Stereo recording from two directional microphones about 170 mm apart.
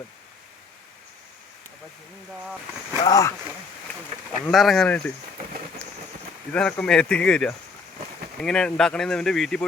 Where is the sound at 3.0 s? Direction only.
20° left (ahead or behind).